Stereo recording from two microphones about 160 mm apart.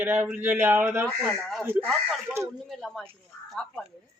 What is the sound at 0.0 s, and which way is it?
Speech, 10° right (ahead or behind).